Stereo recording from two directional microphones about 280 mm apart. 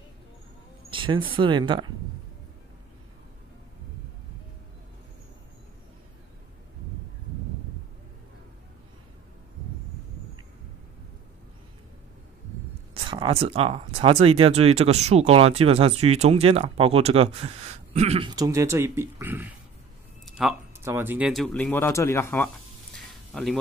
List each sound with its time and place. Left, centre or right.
0.8 s speech: centre
12.9 s speech: centre
22.9 s a sound: centre